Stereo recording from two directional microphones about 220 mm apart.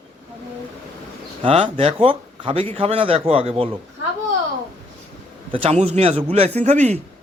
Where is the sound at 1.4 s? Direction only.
25° right (ahead or behind).